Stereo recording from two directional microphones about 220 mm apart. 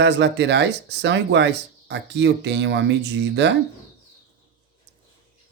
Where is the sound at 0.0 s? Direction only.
50° right (ahead or behind).